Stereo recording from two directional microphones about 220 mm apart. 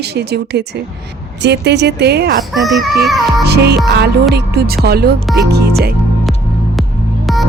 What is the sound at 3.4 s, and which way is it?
Speech, 45° right (ahead or behind).